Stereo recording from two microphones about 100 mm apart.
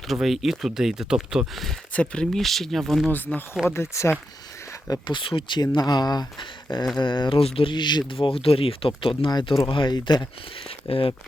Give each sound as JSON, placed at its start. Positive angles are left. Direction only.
{"t": 0.1, "sound": "speech", "side_deg": 0}
{"t": 1.9, "sound": "speech", "side_deg": 10}
{"t": 3.7, "sound": "speech", "side_deg": 25}
{"t": 5.0, "sound": "speech", "side_deg": 55}
{"t": 5.7, "sound": "speech", "side_deg": 45}
{"t": 10.7, "sound": "speech", "side_deg": 65}